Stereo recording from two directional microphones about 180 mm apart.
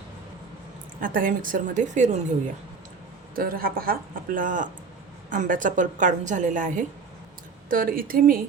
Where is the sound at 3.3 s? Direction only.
55° right (ahead or behind).